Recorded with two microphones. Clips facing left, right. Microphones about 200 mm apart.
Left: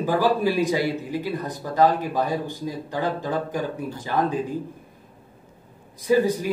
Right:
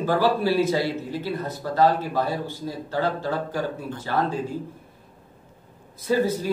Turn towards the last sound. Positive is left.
turn(degrees=15)  # may be behind; listen again after turning